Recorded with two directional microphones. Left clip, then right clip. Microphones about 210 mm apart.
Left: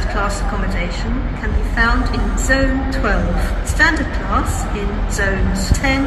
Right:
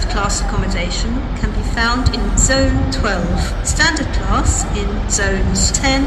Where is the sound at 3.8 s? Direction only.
15° right (ahead or behind).